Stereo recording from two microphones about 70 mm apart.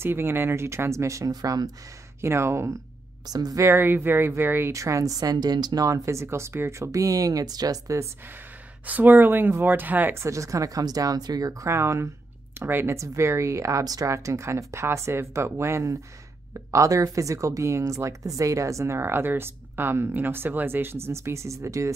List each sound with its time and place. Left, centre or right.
0.0 s speech: right
1.3 s speech: right
2.2 s speech: right
3.3 s speech: right
3.6 s speech: right
4.7 s speech: right
5.9 s speech: right
8.8 s speech: right
10.1 s speech: right
11.7 s speech: right
12.5 s speech: right
12.9 s speech: right